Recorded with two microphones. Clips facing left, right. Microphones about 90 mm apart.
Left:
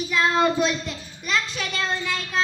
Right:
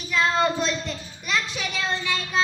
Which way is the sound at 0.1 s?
5° left (ahead or behind).